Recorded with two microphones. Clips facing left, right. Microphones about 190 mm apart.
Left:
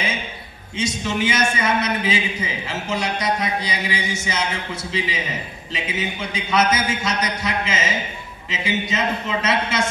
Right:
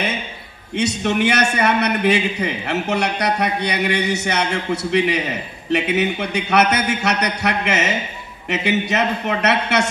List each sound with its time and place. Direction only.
0.7 s a man's voice: 65° right (ahead or behind)